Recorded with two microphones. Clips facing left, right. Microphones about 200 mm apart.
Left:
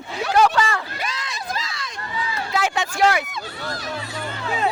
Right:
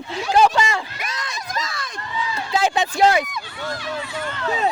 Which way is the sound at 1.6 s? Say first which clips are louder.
Right 3 dB; 50° right (ahead or behind).